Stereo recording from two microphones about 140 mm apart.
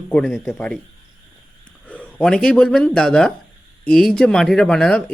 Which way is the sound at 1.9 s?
5° left (ahead or behind).